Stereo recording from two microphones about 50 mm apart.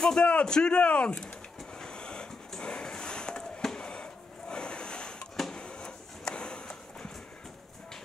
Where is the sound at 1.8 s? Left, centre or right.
Centre.